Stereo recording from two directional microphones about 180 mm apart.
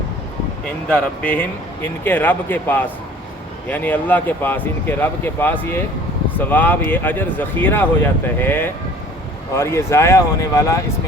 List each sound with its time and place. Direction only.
0.9 s speech: 5° left (ahead or behind)